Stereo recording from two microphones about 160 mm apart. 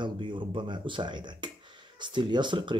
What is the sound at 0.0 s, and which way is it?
Speech, 30° right (ahead or behind).